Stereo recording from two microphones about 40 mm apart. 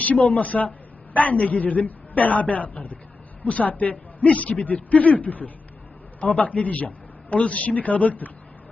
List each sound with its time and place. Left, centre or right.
0.0 s a man's voice: left